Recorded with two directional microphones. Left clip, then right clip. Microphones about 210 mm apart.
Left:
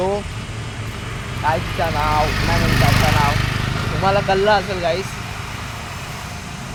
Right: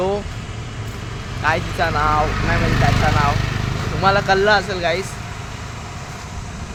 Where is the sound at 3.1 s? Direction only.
Centre (ahead or behind).